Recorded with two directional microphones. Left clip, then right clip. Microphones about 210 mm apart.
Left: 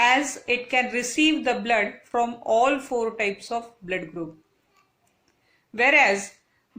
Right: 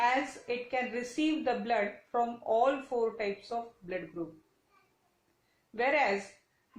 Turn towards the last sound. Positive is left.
turn(degrees=40)  # may be behind; listen again after turning